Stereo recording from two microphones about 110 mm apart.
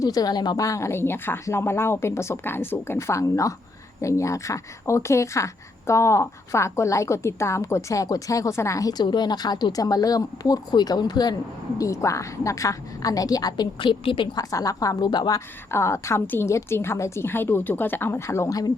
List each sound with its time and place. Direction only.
0.0 s a woman's voice: 35° left (ahead or behind); by 14.3 s 50° left (ahead or behind)
14.3 s a woman's voice: 30° left (ahead or behind)
15.7 s speech: 25° left (ahead or behind)